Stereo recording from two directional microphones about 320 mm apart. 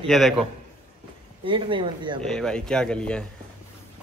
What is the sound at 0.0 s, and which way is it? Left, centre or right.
Speech, centre.